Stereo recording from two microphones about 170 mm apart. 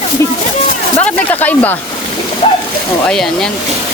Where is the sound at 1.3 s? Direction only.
10° left (ahead or behind).